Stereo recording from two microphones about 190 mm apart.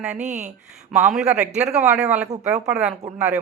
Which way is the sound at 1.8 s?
5° right (ahead or behind).